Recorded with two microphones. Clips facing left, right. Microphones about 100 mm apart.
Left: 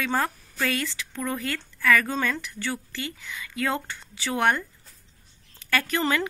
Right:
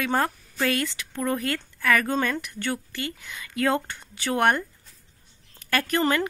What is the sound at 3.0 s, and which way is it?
Speech, 55° right (ahead or behind).